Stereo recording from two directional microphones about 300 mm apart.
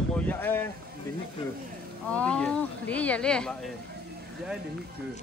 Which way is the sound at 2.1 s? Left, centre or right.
Centre.